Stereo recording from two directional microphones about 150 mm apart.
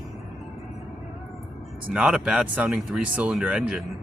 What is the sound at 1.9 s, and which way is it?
Speech, 5° right (ahead or behind).